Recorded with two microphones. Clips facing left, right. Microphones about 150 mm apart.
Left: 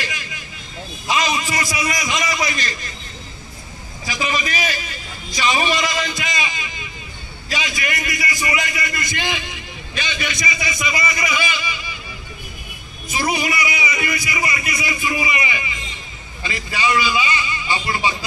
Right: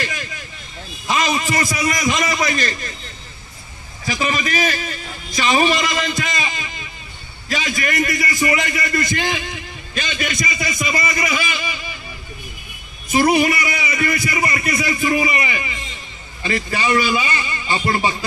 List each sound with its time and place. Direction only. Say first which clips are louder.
0.0 s vehicle: right 3 dB; 45° right (ahead or behind)
1.1 s a man's voice: right 2 dB; 45° right (ahead or behind)
4.1 s a man's voice: right 2 dB; 45° right (ahead or behind)
13.1 s a man's voice: right 7 dB; 50° right (ahead or behind)